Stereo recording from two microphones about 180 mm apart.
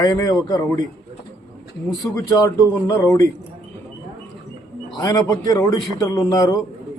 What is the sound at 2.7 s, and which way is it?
Speech, 15° left (ahead or behind).